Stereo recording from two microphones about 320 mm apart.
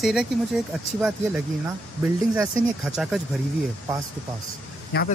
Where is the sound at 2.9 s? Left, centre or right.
Centre.